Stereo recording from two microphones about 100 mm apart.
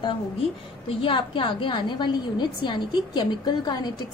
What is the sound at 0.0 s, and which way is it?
A woman's voice, 60° left (ahead or behind).